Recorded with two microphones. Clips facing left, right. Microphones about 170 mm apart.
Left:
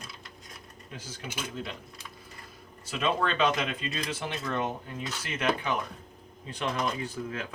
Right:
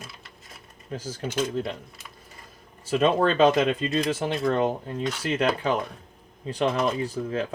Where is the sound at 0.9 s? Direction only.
40° right (ahead or behind).